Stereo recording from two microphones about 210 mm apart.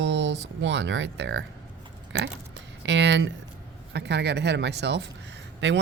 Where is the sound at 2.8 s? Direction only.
60° right (ahead or behind).